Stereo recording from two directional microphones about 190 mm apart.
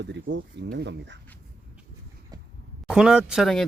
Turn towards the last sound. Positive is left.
turn(degrees=0)  # may be behind; listen again after turning